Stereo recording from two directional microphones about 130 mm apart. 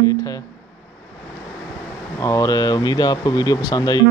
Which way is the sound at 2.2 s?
25° left (ahead or behind).